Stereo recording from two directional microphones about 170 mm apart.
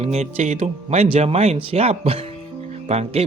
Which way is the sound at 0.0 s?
40° right (ahead or behind).